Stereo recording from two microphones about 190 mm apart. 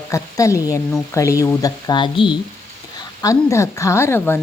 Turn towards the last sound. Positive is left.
turn(degrees=10)  # may be behind; listen again after turning